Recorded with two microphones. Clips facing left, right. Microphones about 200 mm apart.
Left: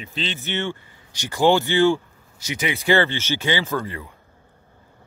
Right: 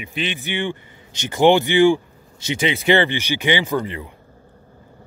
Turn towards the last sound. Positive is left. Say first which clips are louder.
# right 3 dB
turn(degrees=-15)  # may be behind; listen again after turning